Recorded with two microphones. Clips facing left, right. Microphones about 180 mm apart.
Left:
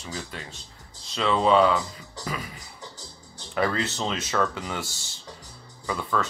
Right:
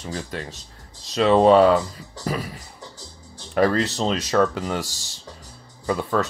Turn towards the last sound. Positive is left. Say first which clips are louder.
# right 5 dB
turn(degrees=-40)  # may be behind; listen again after turning